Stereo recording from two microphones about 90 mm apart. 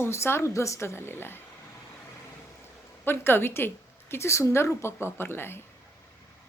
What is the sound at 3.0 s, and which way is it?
A woman's voice, 25° left (ahead or behind).